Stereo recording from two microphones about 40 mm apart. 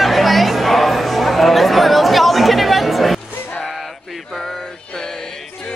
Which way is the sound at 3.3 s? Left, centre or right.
Left.